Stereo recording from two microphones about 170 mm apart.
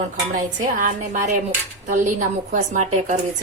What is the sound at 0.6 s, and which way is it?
A woman's voice, 45° right (ahead or behind).